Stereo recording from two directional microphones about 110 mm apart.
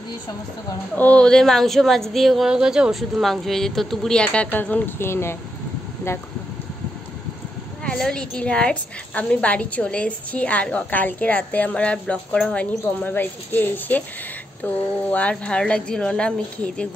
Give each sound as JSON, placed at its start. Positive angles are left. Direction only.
{"t": 0.9, "sound": "a woman's voice", "side_deg": 15}
{"t": 7.8, "sound": "a woman's voice", "side_deg": 10}